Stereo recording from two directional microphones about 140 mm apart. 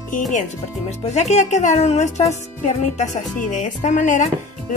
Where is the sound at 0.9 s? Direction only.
55° left (ahead or behind).